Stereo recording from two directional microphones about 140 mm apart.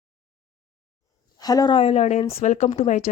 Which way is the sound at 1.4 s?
30° left (ahead or behind).